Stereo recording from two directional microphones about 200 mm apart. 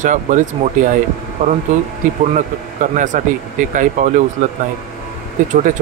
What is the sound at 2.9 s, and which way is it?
Speech, 40° right (ahead or behind).